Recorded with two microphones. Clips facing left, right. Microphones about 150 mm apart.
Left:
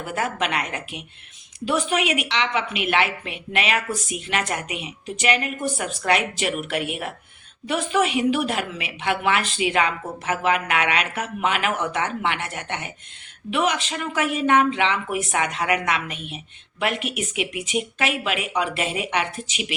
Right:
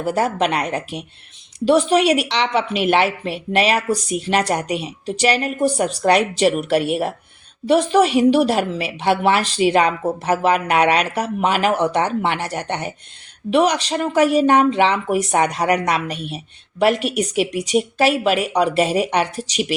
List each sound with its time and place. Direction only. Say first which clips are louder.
0.0 s a woman's voice: right 7 dB; 35° right (ahead or behind)